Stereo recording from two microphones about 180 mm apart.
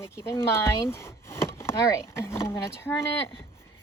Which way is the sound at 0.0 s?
15° left (ahead or behind).